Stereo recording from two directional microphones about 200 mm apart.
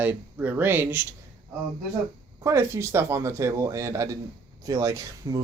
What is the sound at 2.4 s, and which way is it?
Speech, 15° right (ahead or behind).